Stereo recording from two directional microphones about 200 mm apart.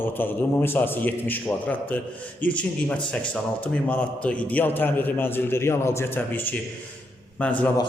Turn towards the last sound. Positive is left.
turn(degrees=5)  # may be behind; listen again after turning